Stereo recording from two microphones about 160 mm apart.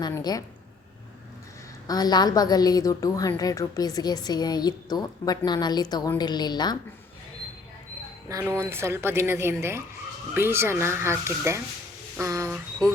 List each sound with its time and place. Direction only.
0.0 s a woman's voice: 25° left (ahead or behind)
1.9 s a woman's voice: 25° left (ahead or behind)
8.3 s a woman's voice: 20° right (ahead or behind)